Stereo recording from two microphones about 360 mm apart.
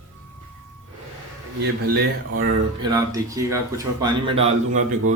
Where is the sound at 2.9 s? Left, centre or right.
Centre.